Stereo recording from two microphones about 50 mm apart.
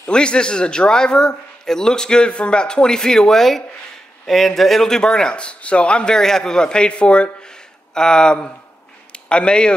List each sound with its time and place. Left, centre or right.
0.1 s a man's voice: centre